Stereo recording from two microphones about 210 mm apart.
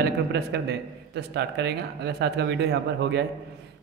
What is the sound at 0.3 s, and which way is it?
A man's voice, 50° right (ahead or behind).